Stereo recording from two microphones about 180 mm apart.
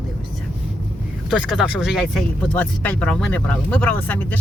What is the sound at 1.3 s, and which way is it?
Speech, 5° right (ahead or behind).